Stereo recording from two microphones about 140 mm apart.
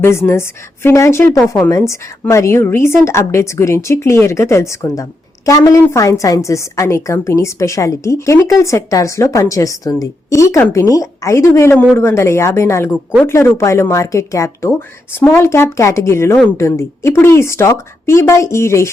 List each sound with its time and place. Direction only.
0.0 s a woman's voice: 20° left (ahead or behind)
12.9 s speech: 5° right (ahead or behind)
13.2 s a woman's voice: 20° left (ahead or behind)